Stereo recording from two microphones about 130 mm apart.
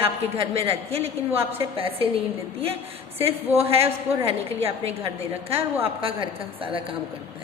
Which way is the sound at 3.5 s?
50° right (ahead or behind).